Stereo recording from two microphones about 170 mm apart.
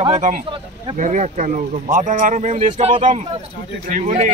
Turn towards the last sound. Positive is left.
turn(degrees=-45)  # may be behind; listen again after turning